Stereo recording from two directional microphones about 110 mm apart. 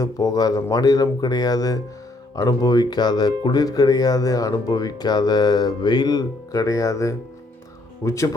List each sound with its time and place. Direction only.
0.0 s speech: 35° left (ahead or behind)